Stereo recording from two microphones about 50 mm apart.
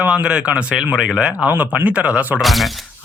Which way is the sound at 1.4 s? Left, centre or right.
Right.